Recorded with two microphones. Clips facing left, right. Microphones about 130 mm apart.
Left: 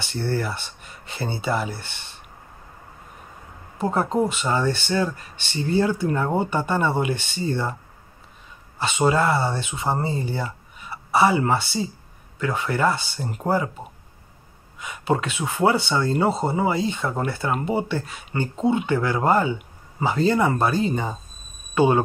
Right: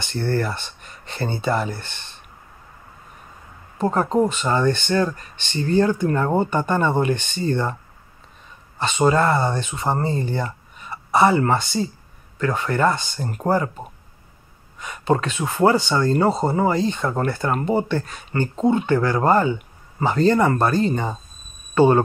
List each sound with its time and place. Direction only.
0.0 s speech: 55° right (ahead or behind)
0.4 s speech: 10° left (ahead or behind)
3.7 s speech: 10° left (ahead or behind)
8.7 s speech: 10° left (ahead or behind)
14.8 s speech: 10° left (ahead or behind)